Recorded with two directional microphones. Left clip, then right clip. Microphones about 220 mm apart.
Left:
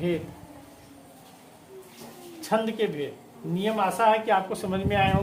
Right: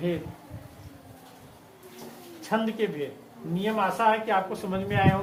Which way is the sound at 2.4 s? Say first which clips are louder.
Left 2 dB; 30° left (ahead or behind).